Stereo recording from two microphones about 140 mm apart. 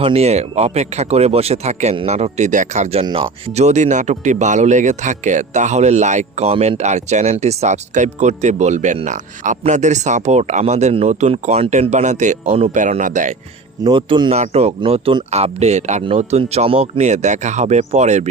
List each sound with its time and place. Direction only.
0.0 s speech: 50° right (ahead or behind); by 13.3 s 65° right (ahead or behind)
13.8 s speech: 35° right (ahead or behind)
14.4 s speech: 50° right (ahead or behind)
16.4 s speech: 45° right (ahead or behind)